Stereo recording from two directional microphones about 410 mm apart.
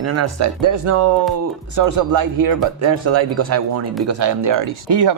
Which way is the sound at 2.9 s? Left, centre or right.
Right.